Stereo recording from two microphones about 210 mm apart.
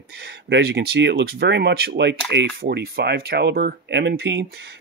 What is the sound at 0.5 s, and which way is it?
Speech, 55° right (ahead or behind).